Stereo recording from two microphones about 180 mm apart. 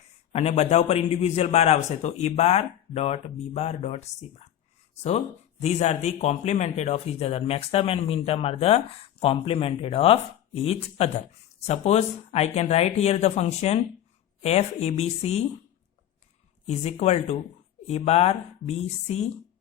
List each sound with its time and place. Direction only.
0.3 s a man's voice: 35° left (ahead or behind)
16.6 s a man's voice: 35° left (ahead or behind)